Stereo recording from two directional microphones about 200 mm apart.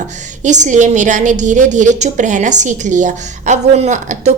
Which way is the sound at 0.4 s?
35° right (ahead or behind).